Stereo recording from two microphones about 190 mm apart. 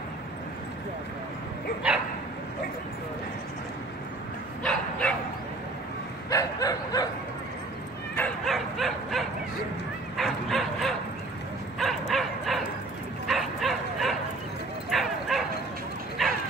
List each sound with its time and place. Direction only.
4.6 s bow-wow: 5° left (ahead or behind)
6.3 s bow-wow: 20° left (ahead or behind)
8.2 s bow-wow: centre (ahead or behind)